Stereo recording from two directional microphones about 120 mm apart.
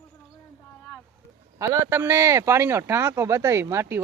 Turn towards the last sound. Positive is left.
turn(degrees=-20)  # may be behind; listen again after turning